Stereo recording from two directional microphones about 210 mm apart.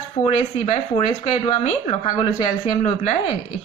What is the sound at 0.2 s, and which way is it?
Speech, 30° left (ahead or behind).